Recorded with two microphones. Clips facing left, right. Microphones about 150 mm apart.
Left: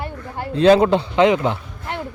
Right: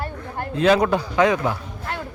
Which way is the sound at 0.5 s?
30° left (ahead or behind).